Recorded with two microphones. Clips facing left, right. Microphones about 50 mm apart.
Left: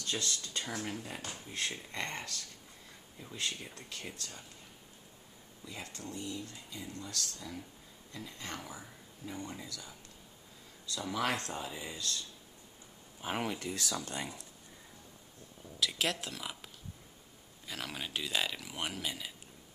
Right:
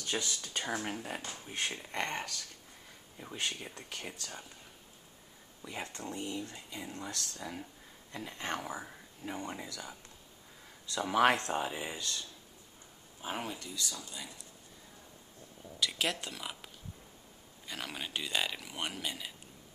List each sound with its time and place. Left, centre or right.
0.0 s speech: right
4.0 s speech: right
5.6 s speech: right
13.3 s speech: left
13.7 s speech: left
13.9 s speech: left
15.8 s speech: centre